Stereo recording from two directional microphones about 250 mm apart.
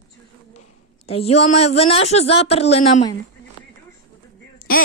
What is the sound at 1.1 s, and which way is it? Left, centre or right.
Speech, left.